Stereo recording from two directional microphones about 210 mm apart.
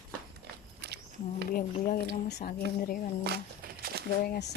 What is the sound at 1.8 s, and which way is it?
Speech, 40° left (ahead or behind).